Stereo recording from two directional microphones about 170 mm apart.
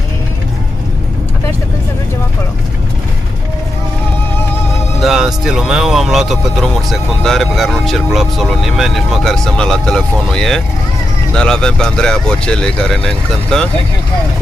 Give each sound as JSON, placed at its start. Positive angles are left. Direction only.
{"t": 5.0, "sound": "speech", "side_deg": 0}